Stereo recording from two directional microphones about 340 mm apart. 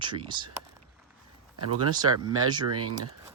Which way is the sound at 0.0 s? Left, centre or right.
Centre.